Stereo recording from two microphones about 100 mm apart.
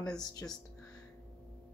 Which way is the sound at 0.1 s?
40° left (ahead or behind).